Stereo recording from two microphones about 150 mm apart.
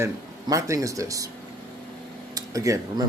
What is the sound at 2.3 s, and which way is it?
Speech, 20° right (ahead or behind).